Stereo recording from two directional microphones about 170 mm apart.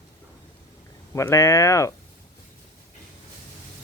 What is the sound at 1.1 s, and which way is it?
Speech, 15° left (ahead or behind).